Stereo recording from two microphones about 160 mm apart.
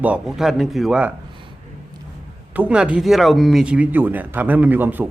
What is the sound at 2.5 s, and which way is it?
Speech, 10° right (ahead or behind).